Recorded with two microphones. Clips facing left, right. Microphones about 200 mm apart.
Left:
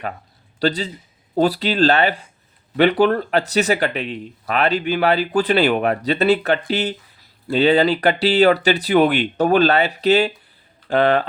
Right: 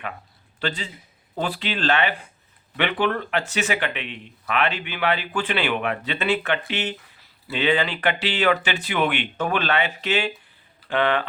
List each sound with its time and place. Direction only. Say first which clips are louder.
0.6 s speech: left 8 dB; 40° left (ahead or behind)